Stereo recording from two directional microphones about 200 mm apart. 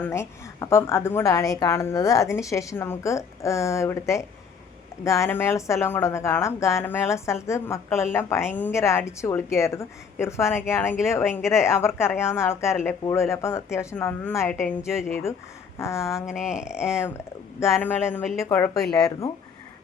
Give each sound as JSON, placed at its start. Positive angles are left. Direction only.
{"t": 0.0, "sound": "a woman's voice", "side_deg": 15}
{"t": 15.8, "sound": "a woman's voice", "side_deg": 15}
{"t": 16.2, "sound": "speech", "side_deg": -5}
{"t": 16.8, "sound": "a woman's voice", "side_deg": 15}